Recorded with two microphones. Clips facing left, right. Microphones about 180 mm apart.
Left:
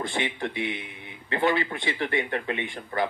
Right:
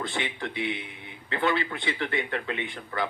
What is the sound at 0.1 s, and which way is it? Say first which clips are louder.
Speech: left 3 dB; 20° left (ahead or behind).